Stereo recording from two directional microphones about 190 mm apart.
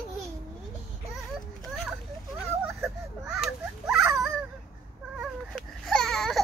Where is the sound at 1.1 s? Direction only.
Centre (ahead or behind).